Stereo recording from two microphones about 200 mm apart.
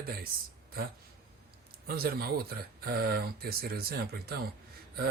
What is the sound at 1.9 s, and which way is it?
Speech, 50° right (ahead or behind).